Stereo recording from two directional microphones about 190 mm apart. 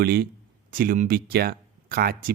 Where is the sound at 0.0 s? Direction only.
55° right (ahead or behind).